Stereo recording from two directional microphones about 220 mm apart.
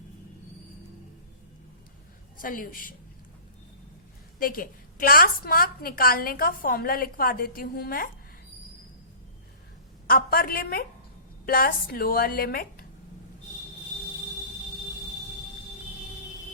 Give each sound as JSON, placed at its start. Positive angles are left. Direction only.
{"t": 2.4, "sound": "a woman's voice", "side_deg": 40}
{"t": 4.4, "sound": "a woman's voice", "side_deg": 40}
{"t": 10.1, "sound": "a woman's voice", "side_deg": 40}